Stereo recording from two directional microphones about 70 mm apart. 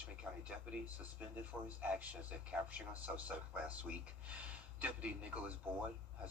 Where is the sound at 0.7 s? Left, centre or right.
Centre.